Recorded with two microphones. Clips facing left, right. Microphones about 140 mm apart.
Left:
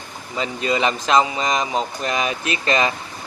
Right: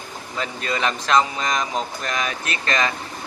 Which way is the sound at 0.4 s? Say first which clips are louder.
Left 4 dB; 5° left (ahead or behind).